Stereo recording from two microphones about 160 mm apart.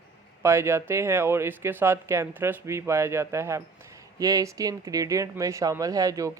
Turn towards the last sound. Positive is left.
turn(degrees=-20)  # may be behind; listen again after turning